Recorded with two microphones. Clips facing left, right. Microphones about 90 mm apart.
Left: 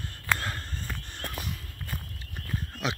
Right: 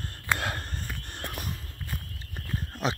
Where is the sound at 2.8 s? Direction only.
35° right (ahead or behind).